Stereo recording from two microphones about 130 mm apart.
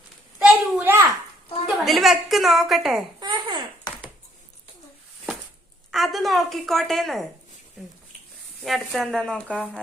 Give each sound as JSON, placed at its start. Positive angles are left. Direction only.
{"t": 0.3, "sound": "a sound", "side_deg": -10}
{"t": 1.6, "sound": "a woman's voice", "side_deg": 0}
{"t": 3.2, "sound": "babbling", "side_deg": -35}
{"t": 5.9, "sound": "a woman's voice", "side_deg": 0}
{"t": 8.7, "sound": "a woman's voice", "side_deg": 0}